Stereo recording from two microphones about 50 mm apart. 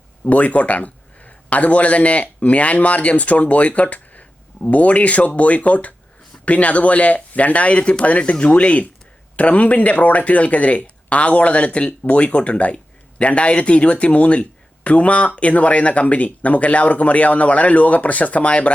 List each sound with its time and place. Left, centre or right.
0.3 s a man's voice: left